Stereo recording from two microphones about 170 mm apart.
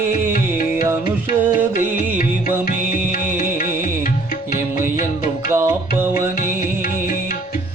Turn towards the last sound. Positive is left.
turn(degrees=-15)  # may be behind; listen again after turning